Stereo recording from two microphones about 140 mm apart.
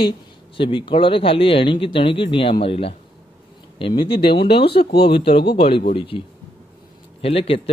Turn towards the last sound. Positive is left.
turn(degrees=45)  # may be behind; listen again after turning